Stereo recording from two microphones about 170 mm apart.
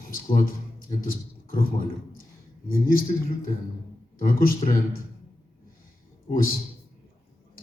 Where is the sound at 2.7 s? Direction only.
55° left (ahead or behind).